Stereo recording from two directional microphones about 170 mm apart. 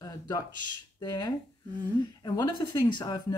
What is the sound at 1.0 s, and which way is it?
Speech, 25° left (ahead or behind).